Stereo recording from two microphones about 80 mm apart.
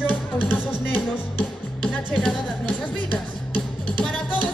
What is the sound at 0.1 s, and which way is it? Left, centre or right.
Music, left.